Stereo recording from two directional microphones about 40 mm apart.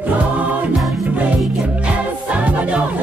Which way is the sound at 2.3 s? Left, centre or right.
Right.